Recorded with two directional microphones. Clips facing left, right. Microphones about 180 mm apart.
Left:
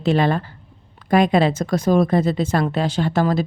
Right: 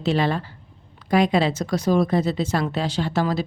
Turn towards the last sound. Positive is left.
turn(degrees=50)  # may be behind; listen again after turning